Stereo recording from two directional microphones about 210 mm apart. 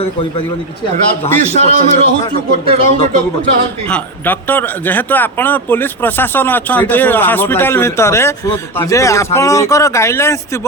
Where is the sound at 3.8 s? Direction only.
5° left (ahead or behind).